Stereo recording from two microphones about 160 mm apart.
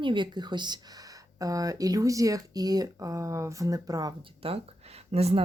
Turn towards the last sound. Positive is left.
turn(degrees=-40)  # may be behind; listen again after turning